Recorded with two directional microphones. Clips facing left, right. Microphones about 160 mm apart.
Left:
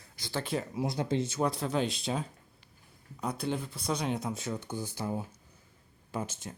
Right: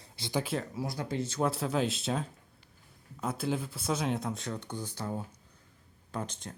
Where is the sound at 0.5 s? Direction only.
10° left (ahead or behind).